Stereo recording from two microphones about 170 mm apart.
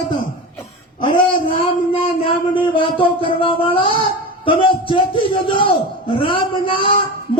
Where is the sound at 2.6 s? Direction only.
30° left (ahead or behind).